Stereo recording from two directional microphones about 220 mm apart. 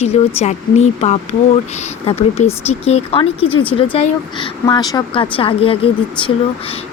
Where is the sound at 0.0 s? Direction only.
30° left (ahead or behind).